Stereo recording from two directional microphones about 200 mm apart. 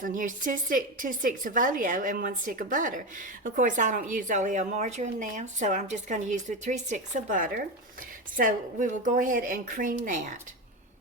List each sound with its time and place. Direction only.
0.0 s a woman's voice: 40° right (ahead or behind)